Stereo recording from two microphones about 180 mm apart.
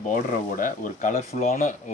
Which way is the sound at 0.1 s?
45° left (ahead or behind).